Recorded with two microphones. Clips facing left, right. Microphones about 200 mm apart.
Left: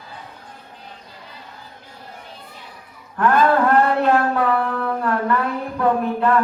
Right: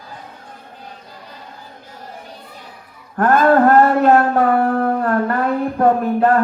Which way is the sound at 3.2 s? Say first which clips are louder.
Right 4 dB; 45° right (ahead or behind).